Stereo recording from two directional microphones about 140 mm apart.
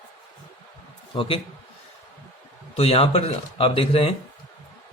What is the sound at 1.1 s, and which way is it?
Speech, 40° left (ahead or behind).